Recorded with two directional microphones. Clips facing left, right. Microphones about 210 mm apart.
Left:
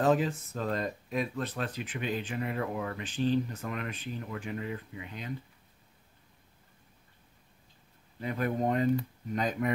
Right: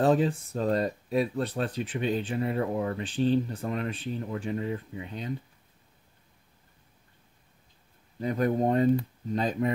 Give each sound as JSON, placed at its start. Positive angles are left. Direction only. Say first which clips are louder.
{"t": 0.0, "sound": "speech", "louder": "right 3 dB", "side_deg": -35}
{"t": 8.2, "sound": "speech", "louder": "right 5 dB", "side_deg": -35}